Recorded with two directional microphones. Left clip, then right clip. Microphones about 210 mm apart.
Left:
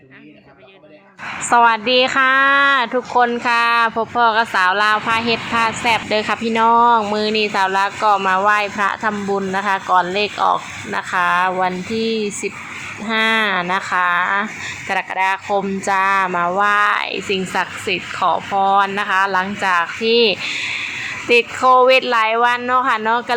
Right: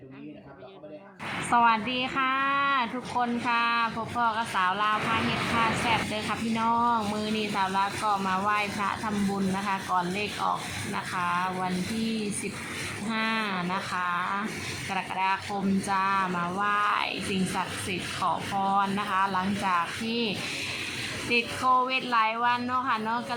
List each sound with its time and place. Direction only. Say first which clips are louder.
1.5 s speech: left 10 dB; 20° left (ahead or behind)
13.1 s speech: left 14 dB; 20° left (ahead or behind)